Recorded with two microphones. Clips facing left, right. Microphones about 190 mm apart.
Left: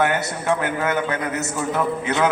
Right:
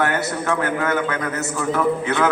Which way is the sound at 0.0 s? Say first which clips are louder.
Even; 20° left (ahead or behind).